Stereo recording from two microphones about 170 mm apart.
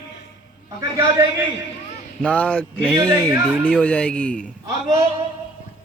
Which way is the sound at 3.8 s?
10° left (ahead or behind).